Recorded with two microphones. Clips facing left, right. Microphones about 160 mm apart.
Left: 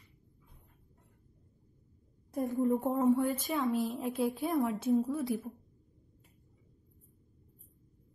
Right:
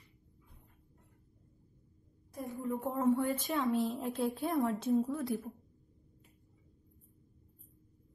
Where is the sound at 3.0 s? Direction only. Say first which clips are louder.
Right 1 dB; centre (ahead or behind).